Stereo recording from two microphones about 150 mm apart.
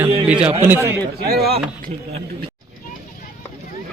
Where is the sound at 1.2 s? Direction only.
90° right.